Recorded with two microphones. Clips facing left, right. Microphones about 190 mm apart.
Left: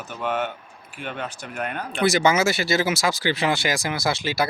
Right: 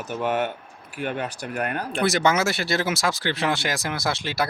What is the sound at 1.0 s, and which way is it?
Speech, 40° right (ahead or behind).